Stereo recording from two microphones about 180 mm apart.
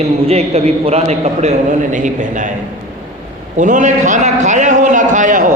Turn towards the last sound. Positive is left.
turn(degrees=-45)  # may be behind; listen again after turning